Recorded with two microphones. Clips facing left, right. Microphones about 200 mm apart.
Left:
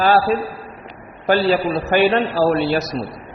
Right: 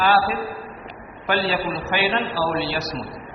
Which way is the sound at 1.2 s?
40° left (ahead or behind).